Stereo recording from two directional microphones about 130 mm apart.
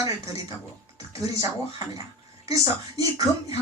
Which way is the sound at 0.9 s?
25° right (ahead or behind).